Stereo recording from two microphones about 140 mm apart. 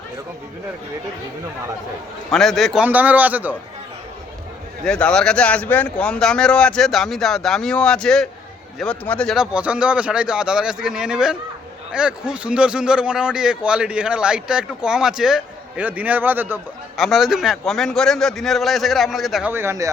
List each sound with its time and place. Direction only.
2.3 s speech: centre (ahead or behind)
2.8 s a man's voice: 10° right (ahead or behind)
4.9 s a man's voice: 5° left (ahead or behind); by 16.6 s 15° right (ahead or behind)
17.0 s speech: centre (ahead or behind)
19.5 s a man's voice: 15° right (ahead or behind)